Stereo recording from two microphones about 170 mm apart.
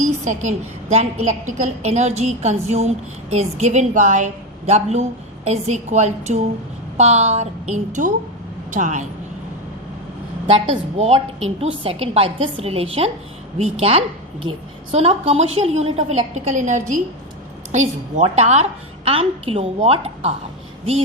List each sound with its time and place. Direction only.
0.0 s a woman's voice: 45° right (ahead or behind)
10.9 s a woman's voice: 40° right (ahead or behind)
14.5 s a woman's voice: 25° right (ahead or behind)